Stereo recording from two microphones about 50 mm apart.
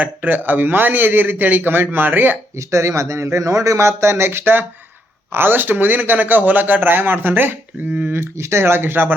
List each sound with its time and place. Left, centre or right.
0.0 s a man's voice: right
2.6 s a man's voice: right
8.1 s speech: right